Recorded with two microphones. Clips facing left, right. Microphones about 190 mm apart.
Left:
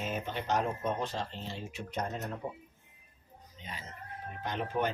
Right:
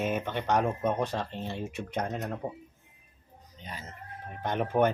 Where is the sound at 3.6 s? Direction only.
40° right (ahead or behind).